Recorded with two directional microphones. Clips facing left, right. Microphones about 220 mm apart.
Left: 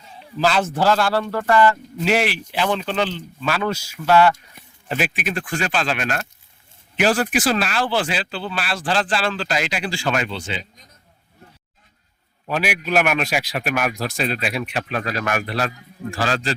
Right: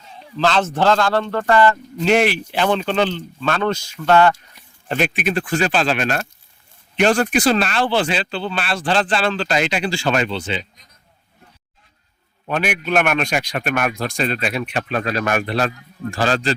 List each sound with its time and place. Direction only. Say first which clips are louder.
0.3 s a man's voice: right 1 dB; 10° left (ahead or behind)
5.3 s speech: right 5 dB; 30° right (ahead or behind)
6.9 s a man's voice: right 3 dB; 5° left (ahead or behind)
10.3 s speech: right 4 dB; 25° right (ahead or behind)
12.5 s a man's voice: right 2 dB; 5° left (ahead or behind)
15.0 s speech: right 3 dB; 30° right (ahead or behind)